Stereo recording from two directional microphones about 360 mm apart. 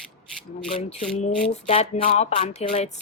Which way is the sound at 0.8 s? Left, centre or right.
Centre.